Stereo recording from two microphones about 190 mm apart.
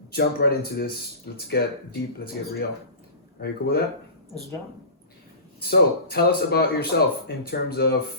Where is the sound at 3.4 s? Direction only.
55° left (ahead or behind).